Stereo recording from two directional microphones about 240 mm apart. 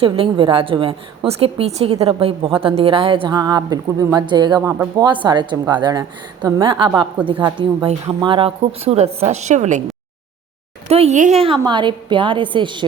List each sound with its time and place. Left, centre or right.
0.0 s a woman's voice: right
10.8 s a woman's voice: right